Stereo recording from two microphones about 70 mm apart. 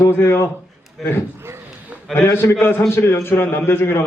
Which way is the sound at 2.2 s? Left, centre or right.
Left.